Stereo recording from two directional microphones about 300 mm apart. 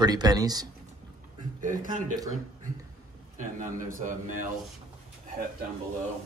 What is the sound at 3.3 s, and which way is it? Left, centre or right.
A man's voice, right.